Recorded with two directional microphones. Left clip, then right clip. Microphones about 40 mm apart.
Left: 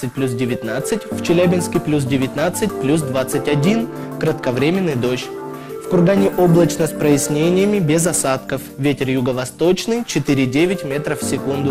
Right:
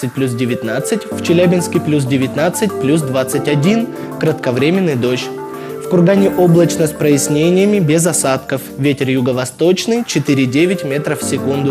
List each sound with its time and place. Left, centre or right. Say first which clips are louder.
0.2 s speech: right 3 dB; right